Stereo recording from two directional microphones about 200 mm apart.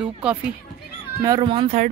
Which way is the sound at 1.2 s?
25° right (ahead or behind).